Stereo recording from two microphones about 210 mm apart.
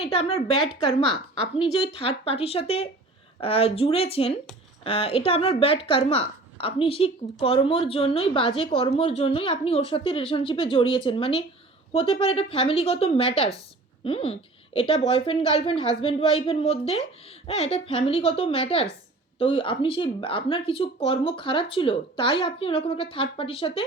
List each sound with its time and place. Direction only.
0.0 s a woman's voice: 25° left (ahead or behind)